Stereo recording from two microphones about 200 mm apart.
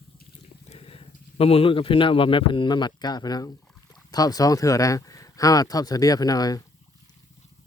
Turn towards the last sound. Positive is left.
turn(degrees=20)  # may be behind; listen again after turning